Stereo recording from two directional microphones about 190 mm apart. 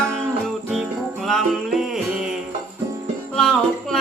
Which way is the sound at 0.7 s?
Centre (ahead or behind).